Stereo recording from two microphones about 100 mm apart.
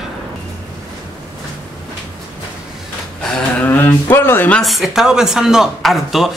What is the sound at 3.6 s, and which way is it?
Speech, 20° left (ahead or behind).